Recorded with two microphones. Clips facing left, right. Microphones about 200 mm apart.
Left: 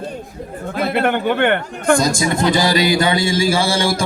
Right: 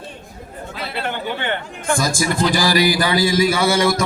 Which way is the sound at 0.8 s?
50° left (ahead or behind).